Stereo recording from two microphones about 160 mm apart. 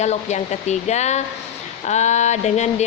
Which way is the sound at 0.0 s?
45° left (ahead or behind).